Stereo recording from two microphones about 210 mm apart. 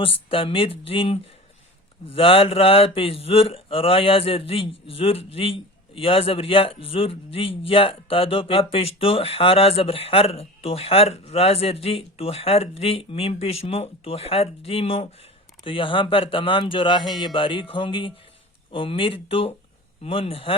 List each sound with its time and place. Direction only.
0.0 s speech: 25° left (ahead or behind)